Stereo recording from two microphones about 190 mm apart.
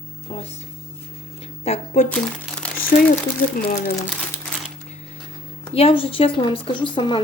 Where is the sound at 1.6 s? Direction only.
35° left (ahead or behind).